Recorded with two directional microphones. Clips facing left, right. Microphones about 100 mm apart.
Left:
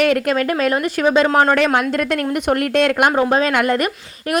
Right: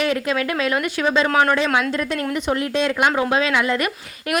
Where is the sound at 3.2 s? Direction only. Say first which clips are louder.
Left 3 dB; 40° left (ahead or behind).